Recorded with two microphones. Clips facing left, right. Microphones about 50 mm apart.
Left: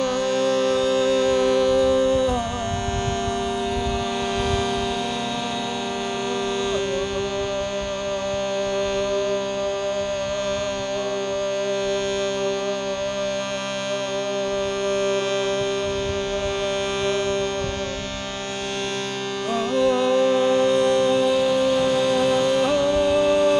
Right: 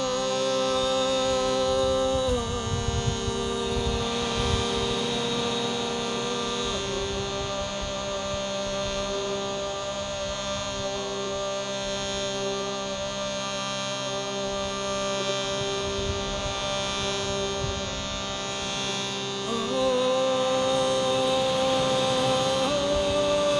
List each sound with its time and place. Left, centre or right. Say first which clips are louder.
0.4 s music: left 6 dB; left
19.8 s music: left 5 dB; left